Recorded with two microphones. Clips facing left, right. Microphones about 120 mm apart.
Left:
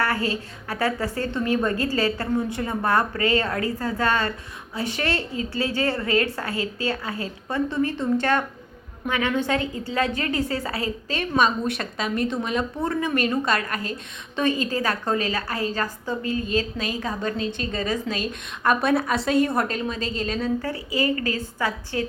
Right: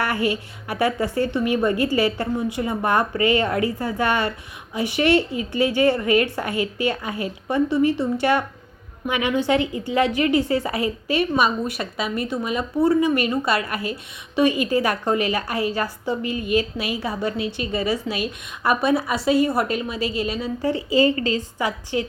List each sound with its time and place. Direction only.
0.0 s a woman's voice: 15° right (ahead or behind)
20.9 s a woman's voice: 25° right (ahead or behind)